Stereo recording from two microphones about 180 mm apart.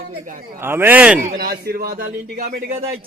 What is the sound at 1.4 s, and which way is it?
A man's voice, 55° right (ahead or behind).